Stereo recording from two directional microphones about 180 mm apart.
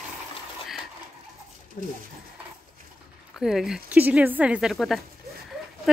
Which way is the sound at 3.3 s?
Centre (ahead or behind).